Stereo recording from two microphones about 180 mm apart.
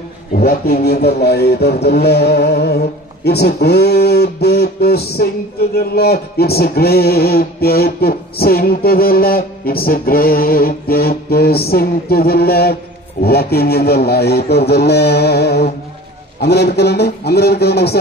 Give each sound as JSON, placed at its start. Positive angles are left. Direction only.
{"t": 0.3, "sound": "speech", "side_deg": 55}